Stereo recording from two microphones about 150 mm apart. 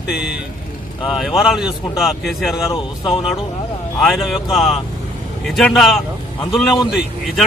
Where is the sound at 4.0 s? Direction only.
Centre (ahead or behind).